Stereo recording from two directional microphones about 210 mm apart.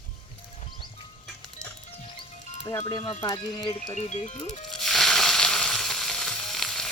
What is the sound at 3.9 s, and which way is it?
Speech, 30° left (ahead or behind).